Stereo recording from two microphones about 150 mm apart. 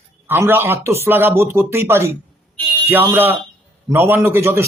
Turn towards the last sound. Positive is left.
turn(degrees=-15)  # may be behind; listen again after turning